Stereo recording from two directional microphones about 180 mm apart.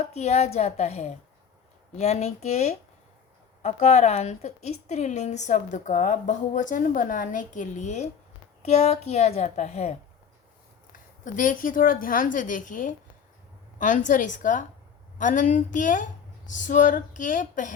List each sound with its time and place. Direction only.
0.1 s a woman's voice: 35° left (ahead or behind)
11.3 s a woman's voice: 50° left (ahead or behind)